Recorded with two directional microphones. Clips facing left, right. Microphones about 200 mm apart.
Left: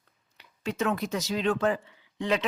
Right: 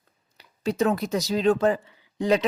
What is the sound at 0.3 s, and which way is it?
Speech, 35° right (ahead or behind).